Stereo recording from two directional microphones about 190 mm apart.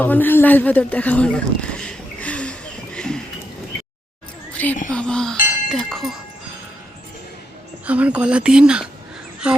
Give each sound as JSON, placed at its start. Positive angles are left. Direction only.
{"t": 0.0, "sound": "a sound", "side_deg": 10}
{"t": 4.5, "sound": "speech", "side_deg": 10}
{"t": 7.9, "sound": "speech", "side_deg": -5}